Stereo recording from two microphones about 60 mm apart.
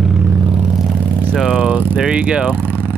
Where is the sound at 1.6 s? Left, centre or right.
Right.